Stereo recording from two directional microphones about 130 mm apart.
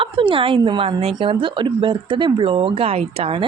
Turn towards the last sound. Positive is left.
turn(degrees=-45)  # may be behind; listen again after turning